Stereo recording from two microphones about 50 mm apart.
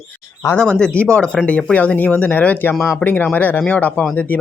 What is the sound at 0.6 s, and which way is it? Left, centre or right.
Speech, centre.